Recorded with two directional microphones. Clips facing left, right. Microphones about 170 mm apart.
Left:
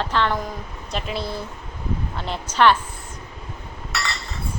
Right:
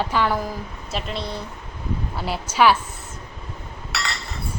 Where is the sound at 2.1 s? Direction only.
5° right (ahead or behind).